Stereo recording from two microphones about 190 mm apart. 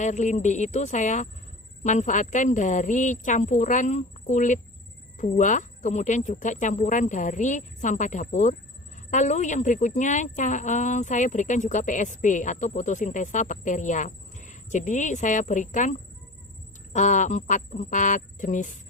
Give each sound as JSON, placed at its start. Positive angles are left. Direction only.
{"t": 0.0, "sound": "speech", "side_deg": 40}